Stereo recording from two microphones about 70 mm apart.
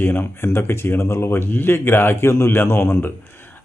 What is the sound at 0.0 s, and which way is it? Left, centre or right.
Speech, left.